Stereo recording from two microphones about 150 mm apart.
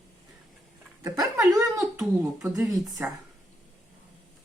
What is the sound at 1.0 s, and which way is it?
Speech, 20° right (ahead or behind).